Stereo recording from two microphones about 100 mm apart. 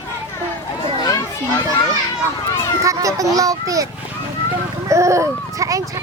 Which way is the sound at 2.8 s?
35° right (ahead or behind).